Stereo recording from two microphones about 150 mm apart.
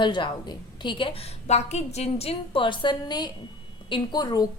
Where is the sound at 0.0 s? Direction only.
30° left (ahead or behind).